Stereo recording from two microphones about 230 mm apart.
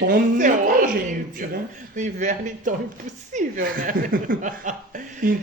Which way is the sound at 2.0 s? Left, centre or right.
Right.